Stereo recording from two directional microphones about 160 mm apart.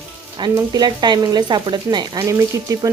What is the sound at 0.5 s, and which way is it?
Speech, 25° right (ahead or behind).